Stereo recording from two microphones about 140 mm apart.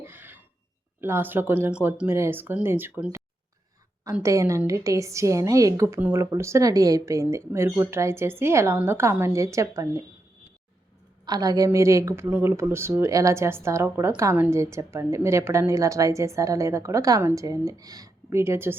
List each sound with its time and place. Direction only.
0.0 s a sound: 15° right (ahead or behind)
1.0 s speech: 15° right (ahead or behind)
4.2 s a woman's voice: 20° right (ahead or behind)
11.3 s a woman's voice: 25° right (ahead or behind)